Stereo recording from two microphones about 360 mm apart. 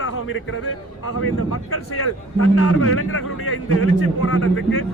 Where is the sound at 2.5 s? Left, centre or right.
Left.